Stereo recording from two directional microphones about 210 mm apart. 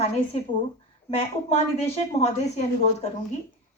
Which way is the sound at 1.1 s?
30° left (ahead or behind).